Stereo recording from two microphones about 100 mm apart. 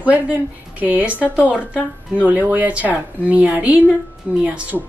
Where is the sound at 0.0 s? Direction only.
15° right (ahead or behind).